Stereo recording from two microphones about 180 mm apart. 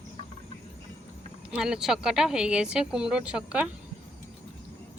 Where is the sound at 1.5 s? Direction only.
5° right (ahead or behind).